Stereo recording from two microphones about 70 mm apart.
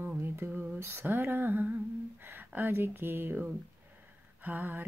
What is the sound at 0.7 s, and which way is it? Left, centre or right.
Speech, right.